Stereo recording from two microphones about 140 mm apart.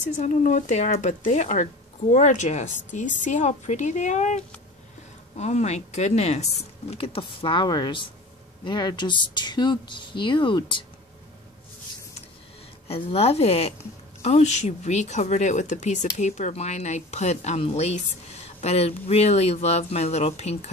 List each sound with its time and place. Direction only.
0.2 s speech: 60° left (ahead or behind); by 10.9 s 35° left (ahead or behind)
12.8 s speech: 45° left (ahead or behind)